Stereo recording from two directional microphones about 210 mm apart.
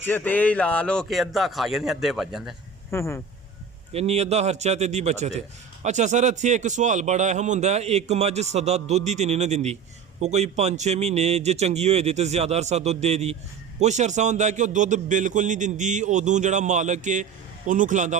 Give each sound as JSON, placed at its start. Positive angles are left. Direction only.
{"t": 0.0, "sound": "a man's voice", "side_deg": 10}
{"t": 2.9, "sound": "speech", "side_deg": 15}
{"t": 3.9, "sound": "a man's voice", "side_deg": -30}